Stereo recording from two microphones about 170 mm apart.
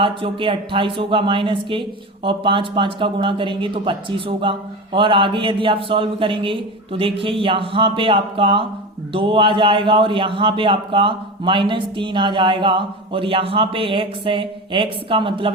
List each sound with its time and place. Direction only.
0.0 s a man's voice: 30° right (ahead or behind)